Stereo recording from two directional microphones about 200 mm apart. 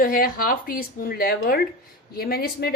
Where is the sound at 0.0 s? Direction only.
45° left (ahead or behind).